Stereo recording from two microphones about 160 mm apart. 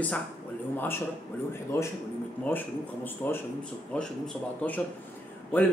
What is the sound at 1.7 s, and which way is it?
A man's voice, 15° left (ahead or behind).